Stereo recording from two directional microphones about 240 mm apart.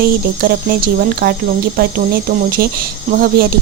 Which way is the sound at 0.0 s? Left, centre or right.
Right.